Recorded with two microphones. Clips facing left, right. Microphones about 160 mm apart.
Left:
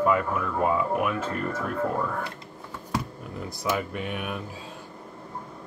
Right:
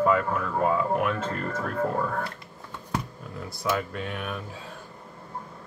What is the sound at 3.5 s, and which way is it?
Speech, 15° left (ahead or behind).